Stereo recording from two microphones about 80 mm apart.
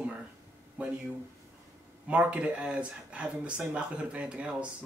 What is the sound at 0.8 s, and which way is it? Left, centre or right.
Speech, centre.